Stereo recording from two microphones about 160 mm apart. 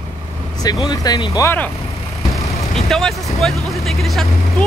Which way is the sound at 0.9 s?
25° left (ahead or behind).